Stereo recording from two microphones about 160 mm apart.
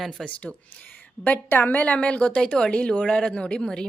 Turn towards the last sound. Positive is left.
turn(degrees=5)  # may be behind; listen again after turning